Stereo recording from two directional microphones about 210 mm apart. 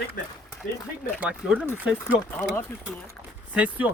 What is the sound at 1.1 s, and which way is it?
Speech, 5° right (ahead or behind).